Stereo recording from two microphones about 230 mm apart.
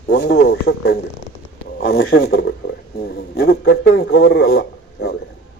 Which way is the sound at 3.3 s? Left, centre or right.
Left.